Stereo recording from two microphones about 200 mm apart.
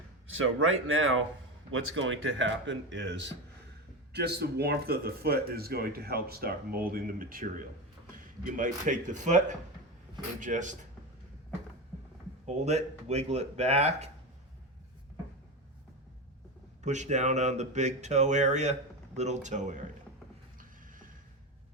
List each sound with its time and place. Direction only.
0.3 s speech: 85° right; by 10.8 s 40° right (ahead or behind)
12.5 s speech: 35° right (ahead or behind)
16.8 s speech: 35° right (ahead or behind)